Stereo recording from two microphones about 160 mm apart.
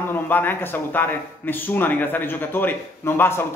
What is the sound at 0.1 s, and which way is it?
Speech, 10° left (ahead or behind).